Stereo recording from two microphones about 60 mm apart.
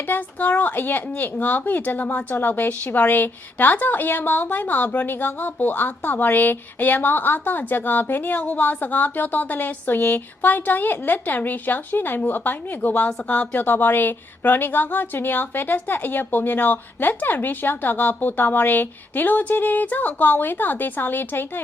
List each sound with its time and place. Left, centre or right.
0.1 s speech: left